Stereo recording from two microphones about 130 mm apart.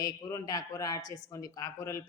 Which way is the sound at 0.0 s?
25° left (ahead or behind).